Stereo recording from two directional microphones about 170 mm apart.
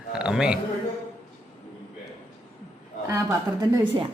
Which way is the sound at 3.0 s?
15° right (ahead or behind).